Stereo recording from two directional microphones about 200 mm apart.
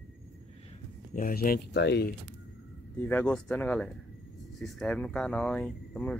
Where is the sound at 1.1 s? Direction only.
45° left (ahead or behind).